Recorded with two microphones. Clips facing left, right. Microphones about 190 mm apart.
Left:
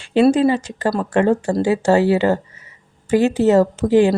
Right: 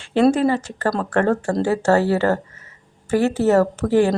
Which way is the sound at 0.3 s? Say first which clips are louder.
Left 3 dB; 15° left (ahead or behind).